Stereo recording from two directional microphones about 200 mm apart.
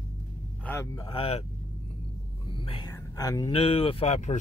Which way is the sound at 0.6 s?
15° left (ahead or behind).